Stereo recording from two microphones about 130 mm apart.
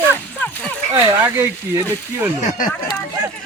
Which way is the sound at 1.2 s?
20° right (ahead or behind).